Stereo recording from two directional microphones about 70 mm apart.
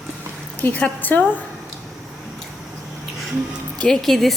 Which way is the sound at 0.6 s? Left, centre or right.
Centre.